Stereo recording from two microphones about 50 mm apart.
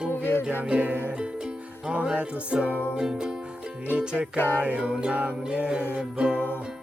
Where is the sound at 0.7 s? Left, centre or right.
Right.